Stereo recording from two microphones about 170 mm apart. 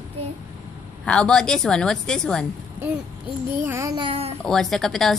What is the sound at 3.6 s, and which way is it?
Speech, 15° right (ahead or behind).